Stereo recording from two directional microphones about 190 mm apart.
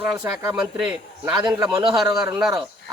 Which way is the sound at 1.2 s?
20° right (ahead or behind).